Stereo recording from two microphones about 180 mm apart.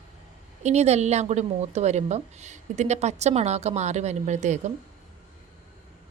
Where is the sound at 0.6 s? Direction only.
35° right (ahead or behind).